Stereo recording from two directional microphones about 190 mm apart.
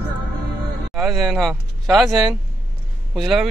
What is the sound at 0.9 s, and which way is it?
Speech, centre (ahead or behind).